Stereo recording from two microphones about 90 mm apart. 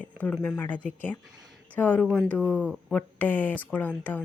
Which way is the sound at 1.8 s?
20° left (ahead or behind).